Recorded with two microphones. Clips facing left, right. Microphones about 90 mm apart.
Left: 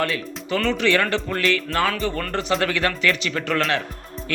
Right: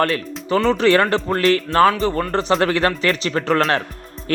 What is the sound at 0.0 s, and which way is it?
Speech, 40° right (ahead or behind).